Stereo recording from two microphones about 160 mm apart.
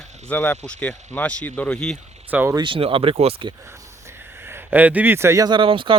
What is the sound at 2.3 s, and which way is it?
Speech, 15° right (ahead or behind).